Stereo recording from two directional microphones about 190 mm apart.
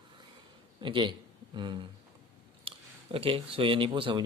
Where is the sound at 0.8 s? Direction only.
25° right (ahead or behind).